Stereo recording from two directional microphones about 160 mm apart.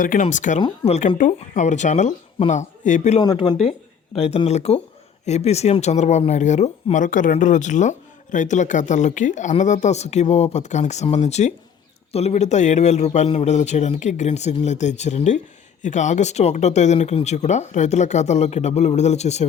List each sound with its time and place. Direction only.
0.2 s speech: 50° left (ahead or behind)
3.2 s speech: 25° left (ahead or behind)
3.6 s speech: 40° left (ahead or behind)